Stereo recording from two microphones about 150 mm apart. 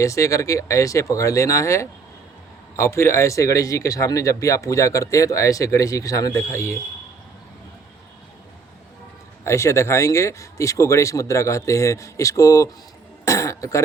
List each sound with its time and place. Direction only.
0.0 s speech: 20° left (ahead or behind)
9.4 s speech: 20° left (ahead or behind)
13.2 s cough: 20° left (ahead or behind)